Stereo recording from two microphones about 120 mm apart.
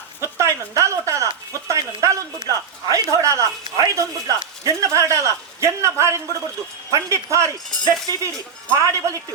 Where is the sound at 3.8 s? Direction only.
25° right (ahead or behind).